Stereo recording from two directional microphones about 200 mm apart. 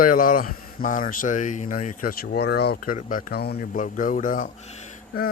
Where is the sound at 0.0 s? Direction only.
45° left (ahead or behind).